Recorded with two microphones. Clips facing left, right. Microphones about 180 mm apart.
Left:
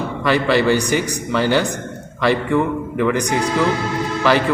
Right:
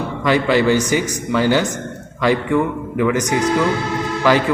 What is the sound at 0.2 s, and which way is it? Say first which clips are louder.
A man's voice: right 1 dB; 15° right (ahead or behind).